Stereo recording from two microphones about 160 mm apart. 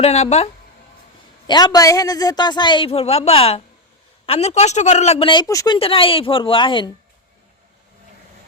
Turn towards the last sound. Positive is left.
turn(degrees=30)  # may be behind; listen again after turning